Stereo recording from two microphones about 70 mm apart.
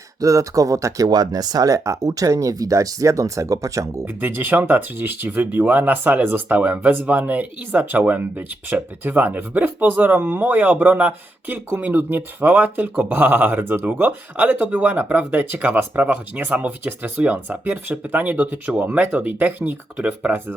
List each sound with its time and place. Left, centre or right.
0.2 s speech: right
1.0 s speech: right
4.0 s speech: right